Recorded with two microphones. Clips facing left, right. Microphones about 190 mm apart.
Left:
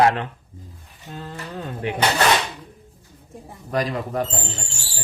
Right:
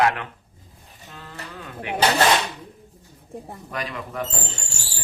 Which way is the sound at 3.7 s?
35° left (ahead or behind).